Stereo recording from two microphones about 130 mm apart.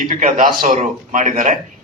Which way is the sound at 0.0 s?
80° right.